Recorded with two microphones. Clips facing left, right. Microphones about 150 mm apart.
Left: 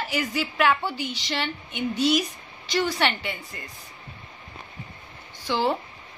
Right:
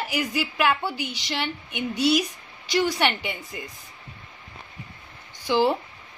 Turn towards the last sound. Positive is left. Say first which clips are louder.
# right 3 dB
turn(degrees=-15)  # may be behind; listen again after turning